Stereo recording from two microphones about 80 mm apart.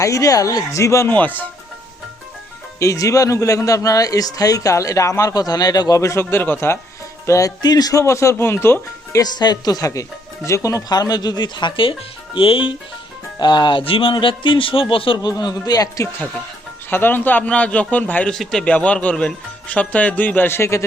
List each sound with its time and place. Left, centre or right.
0.0 s speech: left
1.0 s a man's voice: left
2.7 s speech: left
6.0 s a man's voice: left
7.3 s speech: left
7.6 s speech: left
9.1 s speech: left
13.4 s a man's voice: left
15.3 s speech: left
16.9 s a man's voice: left
18.3 s speech: centre; by 20.8 s left